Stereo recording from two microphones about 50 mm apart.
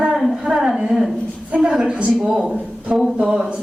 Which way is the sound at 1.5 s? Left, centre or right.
Centre.